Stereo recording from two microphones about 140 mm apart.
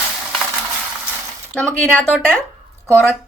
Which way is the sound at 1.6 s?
5° left (ahead or behind).